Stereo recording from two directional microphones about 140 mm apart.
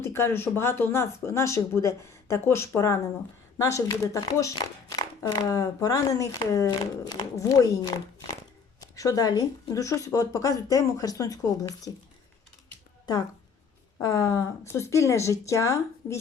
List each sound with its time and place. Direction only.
0.0 s speech: 20° left (ahead or behind)
14.0 s speech: 25° left (ahead or behind)